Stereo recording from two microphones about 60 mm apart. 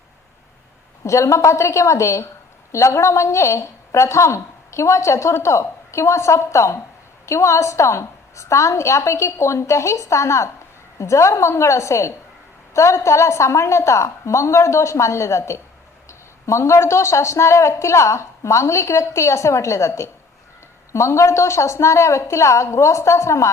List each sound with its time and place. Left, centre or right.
1.0 s a woman's voice: left